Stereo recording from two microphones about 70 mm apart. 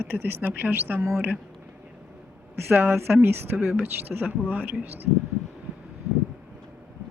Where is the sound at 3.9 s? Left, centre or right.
Right.